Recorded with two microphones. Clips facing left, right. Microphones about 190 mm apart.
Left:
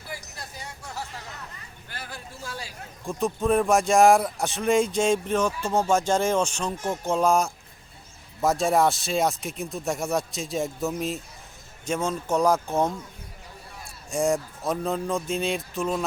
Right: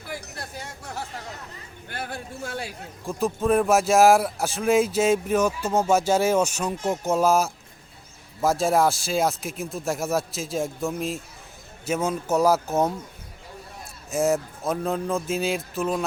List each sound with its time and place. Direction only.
0.1 s music: 60° right (ahead or behind)
1.9 s a sound: 55° right (ahead or behind)
3.1 s speech: centre (ahead or behind)
14.1 s speech: 5° right (ahead or behind)